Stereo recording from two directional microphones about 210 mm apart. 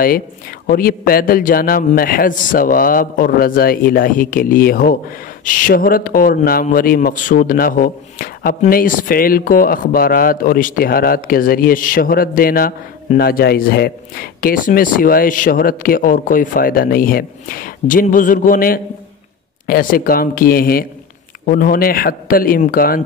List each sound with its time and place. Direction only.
0.7 s a man's voice: 45° left (ahead or behind)